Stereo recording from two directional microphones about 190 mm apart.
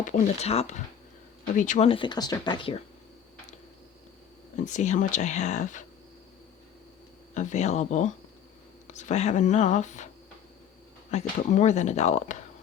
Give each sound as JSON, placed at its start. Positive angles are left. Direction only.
{"t": 0.0, "sound": "speech", "side_deg": 40}
{"t": 1.9, "sound": "speech", "side_deg": 25}
{"t": 4.5, "sound": "speech", "side_deg": 40}
{"t": 7.3, "sound": "speech", "side_deg": 40}
{"t": 11.1, "sound": "speech", "side_deg": 35}